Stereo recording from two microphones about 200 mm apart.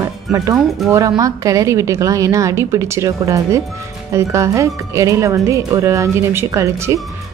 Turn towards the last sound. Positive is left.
turn(degrees=-15)  # may be behind; listen again after turning